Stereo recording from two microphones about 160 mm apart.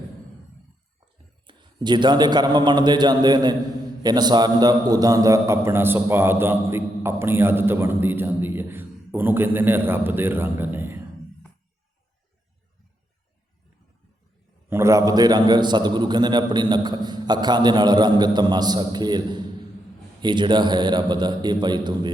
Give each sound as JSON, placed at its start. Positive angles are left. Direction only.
{"t": 1.5, "sound": "a man's voice", "side_deg": -30}
{"t": 14.7, "sound": "a man's voice", "side_deg": -20}